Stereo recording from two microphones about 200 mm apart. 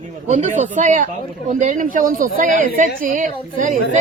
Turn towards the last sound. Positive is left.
turn(degrees=-40)  # may be behind; listen again after turning